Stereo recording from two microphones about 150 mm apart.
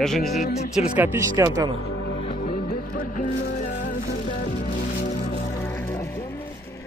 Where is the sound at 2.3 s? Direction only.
65° left (ahead or behind).